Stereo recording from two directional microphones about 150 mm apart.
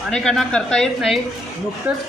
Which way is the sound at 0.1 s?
5° left (ahead or behind).